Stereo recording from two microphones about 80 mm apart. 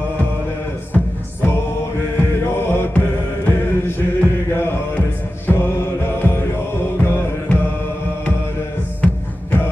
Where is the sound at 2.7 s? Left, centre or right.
Left.